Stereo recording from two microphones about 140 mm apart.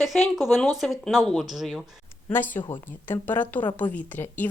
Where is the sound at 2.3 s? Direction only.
15° left (ahead or behind).